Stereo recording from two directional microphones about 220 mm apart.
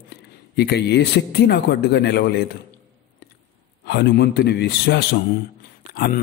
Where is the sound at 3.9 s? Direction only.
50° left (ahead or behind).